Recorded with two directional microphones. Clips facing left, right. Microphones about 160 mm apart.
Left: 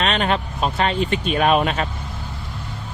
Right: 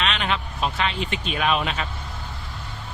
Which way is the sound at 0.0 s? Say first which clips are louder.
Left 5 dB; 45° left (ahead or behind).